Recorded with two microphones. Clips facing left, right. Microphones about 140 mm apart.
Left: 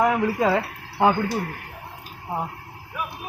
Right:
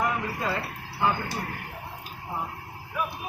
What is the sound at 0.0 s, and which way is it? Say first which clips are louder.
Speech: left 8 dB; 90° left.